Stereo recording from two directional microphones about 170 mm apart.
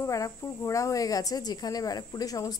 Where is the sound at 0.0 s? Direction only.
20° left (ahead or behind).